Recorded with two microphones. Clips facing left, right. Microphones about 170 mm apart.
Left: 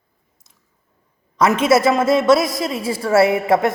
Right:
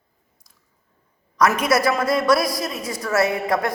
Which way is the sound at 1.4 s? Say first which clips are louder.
Left 4 dB; 25° left (ahead or behind).